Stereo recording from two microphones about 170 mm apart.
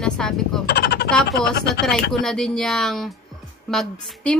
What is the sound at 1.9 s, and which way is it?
A woman's voice, centre (ahead or behind).